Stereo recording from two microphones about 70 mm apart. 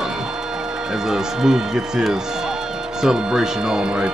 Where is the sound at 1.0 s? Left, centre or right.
Centre.